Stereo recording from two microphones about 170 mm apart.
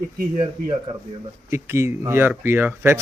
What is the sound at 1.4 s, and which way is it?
Speech, 15° right (ahead or behind).